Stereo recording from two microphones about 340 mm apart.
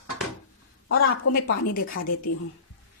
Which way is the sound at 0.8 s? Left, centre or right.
Left.